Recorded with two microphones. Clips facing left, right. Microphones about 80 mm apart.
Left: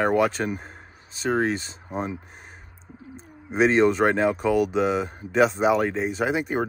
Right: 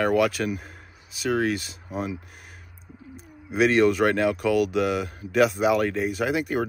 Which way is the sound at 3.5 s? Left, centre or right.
Left.